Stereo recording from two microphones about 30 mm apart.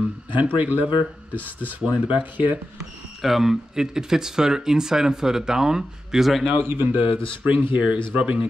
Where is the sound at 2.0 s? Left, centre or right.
Right.